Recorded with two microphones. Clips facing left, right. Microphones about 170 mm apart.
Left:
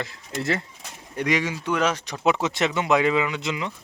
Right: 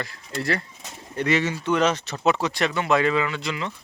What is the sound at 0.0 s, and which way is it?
Speech, 20° left (ahead or behind).